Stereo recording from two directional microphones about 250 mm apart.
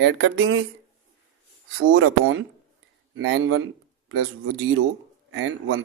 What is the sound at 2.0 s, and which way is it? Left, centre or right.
Speech, right.